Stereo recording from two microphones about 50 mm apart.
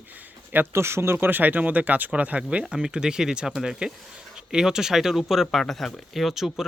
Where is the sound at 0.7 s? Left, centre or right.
Right.